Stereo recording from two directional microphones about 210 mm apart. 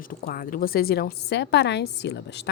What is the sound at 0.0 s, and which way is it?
A woman's voice, 40° left (ahead or behind).